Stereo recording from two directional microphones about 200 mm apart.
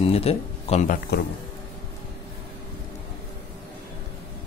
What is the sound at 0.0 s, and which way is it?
Speech, 30° left (ahead or behind).